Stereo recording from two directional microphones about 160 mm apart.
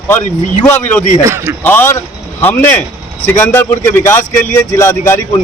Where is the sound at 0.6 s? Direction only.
10° left (ahead or behind).